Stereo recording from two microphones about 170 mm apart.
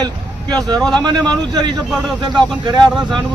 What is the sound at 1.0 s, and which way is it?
Speech, 25° right (ahead or behind).